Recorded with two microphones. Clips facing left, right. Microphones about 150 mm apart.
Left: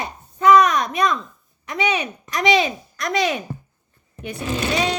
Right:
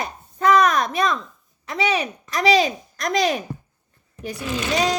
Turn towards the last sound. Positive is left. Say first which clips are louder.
# left 2 dB
turn(degrees=35)  # may be behind; listen again after turning